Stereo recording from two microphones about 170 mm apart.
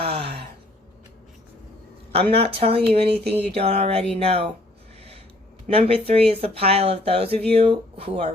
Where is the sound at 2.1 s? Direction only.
35° right (ahead or behind).